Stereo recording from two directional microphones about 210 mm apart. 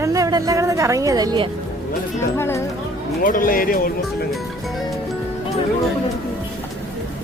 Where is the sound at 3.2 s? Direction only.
40° left (ahead or behind).